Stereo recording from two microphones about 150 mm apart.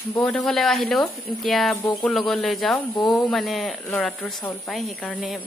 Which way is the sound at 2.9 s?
30° left (ahead or behind).